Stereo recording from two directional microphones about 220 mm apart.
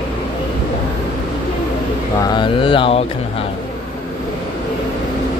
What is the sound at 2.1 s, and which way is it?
Mantra, 20° left (ahead or behind).